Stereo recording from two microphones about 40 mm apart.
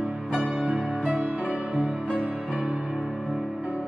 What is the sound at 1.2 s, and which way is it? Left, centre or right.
Music, right.